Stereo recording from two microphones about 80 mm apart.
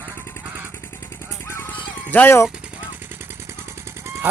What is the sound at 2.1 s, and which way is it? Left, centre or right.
Speech, left.